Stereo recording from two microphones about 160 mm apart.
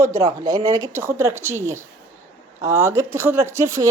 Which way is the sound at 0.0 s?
15° right (ahead or behind).